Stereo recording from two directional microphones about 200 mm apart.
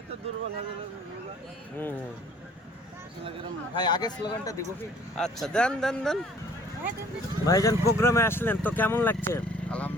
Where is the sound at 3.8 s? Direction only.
20° left (ahead or behind).